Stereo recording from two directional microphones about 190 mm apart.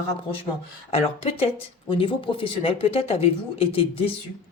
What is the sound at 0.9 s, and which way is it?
A woman's voice, 30° left (ahead or behind).